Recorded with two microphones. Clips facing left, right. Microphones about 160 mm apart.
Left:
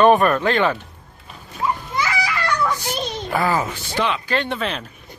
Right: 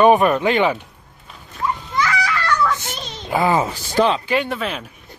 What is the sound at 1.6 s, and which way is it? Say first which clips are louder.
Children playing: right 1 dB; 10° left (ahead or behind).